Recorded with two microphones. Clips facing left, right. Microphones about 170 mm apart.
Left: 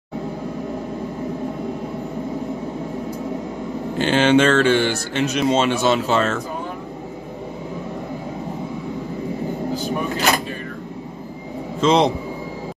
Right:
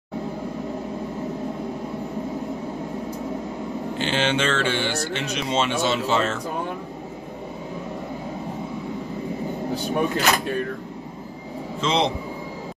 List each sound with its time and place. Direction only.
4.0 s speech: 45° left (ahead or behind)
11.8 s speech: 45° left (ahead or behind)